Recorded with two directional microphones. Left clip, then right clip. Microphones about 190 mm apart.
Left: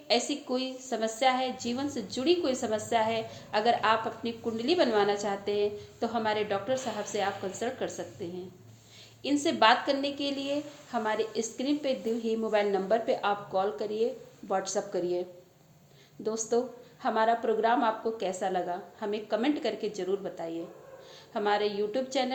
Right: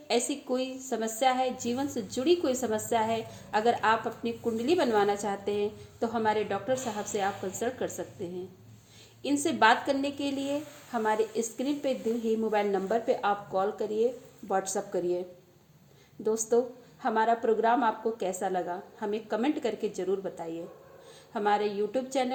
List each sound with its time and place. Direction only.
0.1 s a woman's voice: 35° right (ahead or behind)
16.2 s a woman's voice: 35° right (ahead or behind)